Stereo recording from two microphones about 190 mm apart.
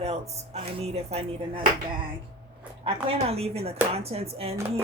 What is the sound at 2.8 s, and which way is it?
Speech, 30° right (ahead or behind).